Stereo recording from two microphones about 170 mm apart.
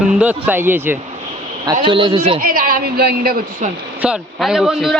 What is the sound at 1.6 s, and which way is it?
Speech, 25° right (ahead or behind).